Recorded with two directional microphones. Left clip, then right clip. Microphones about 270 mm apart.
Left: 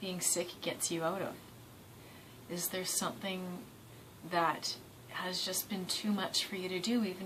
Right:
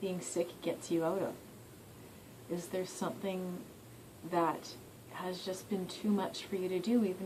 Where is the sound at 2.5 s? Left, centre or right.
Centre.